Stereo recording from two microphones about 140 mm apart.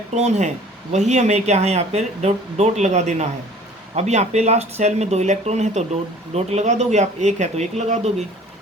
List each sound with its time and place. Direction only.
0.1 s speech: 55° right (ahead or behind)